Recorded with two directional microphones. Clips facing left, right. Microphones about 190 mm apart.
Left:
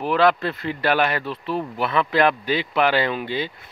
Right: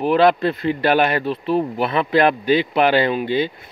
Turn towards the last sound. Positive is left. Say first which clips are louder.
# right 5 dB
turn(degrees=-20)  # may be behind; listen again after turning